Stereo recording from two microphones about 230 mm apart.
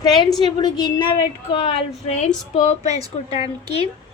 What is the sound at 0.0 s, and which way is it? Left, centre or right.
Speech, centre.